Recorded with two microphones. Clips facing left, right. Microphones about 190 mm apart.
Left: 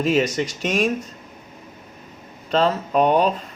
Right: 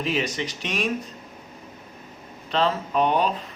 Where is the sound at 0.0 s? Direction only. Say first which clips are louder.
Left 7 dB; 45° left (ahead or behind).